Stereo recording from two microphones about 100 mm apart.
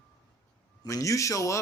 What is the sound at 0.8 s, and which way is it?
Speech, 35° left (ahead or behind).